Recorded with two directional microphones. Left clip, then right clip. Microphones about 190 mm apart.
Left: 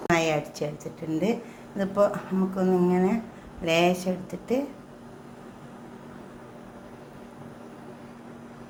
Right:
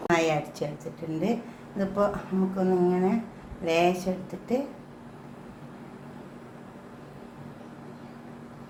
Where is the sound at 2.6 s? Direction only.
40° left (ahead or behind).